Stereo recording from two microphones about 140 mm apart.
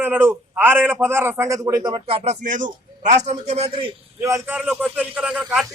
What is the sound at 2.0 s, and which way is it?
A man's voice, 45° right (ahead or behind).